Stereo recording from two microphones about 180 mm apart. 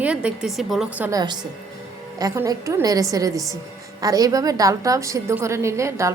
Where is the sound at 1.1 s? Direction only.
25° right (ahead or behind).